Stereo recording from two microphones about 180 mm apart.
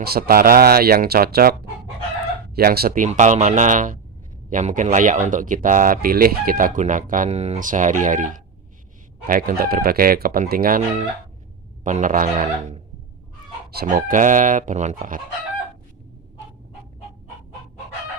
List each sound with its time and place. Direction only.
0.0 s speech: 55° right (ahead or behind)
2.6 s speech: 55° right (ahead or behind)